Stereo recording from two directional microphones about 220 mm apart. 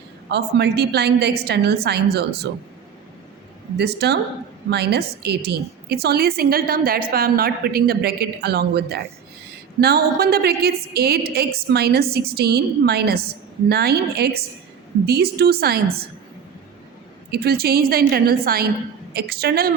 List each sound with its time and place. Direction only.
0.3 s a woman's voice: 50° right (ahead or behind)
3.8 s a woman's voice: 50° right (ahead or behind)
17.3 s a woman's voice: 45° right (ahead or behind)